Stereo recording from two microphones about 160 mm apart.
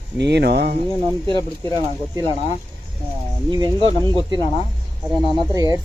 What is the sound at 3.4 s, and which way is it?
Speech, 25° right (ahead or behind).